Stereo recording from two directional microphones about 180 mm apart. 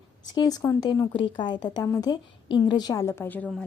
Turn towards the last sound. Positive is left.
turn(degrees=10)  # may be behind; listen again after turning